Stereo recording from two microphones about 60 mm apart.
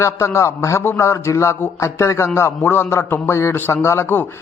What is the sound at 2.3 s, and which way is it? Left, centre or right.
A man's voice, left.